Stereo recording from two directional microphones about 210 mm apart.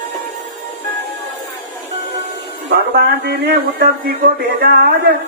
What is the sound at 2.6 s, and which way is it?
A man's voice, 50° right (ahead or behind).